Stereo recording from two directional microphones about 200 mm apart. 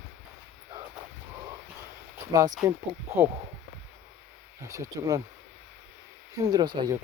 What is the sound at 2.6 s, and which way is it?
Speech, 15° right (ahead or behind).